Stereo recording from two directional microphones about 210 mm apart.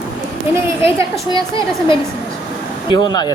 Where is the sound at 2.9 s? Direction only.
20° left (ahead or behind).